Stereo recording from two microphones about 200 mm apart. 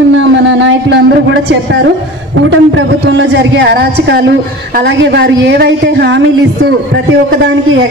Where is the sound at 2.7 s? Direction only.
65° right (ahead or behind).